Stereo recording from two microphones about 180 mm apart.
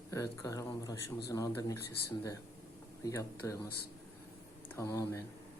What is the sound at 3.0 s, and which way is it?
Speech, 15° left (ahead or behind).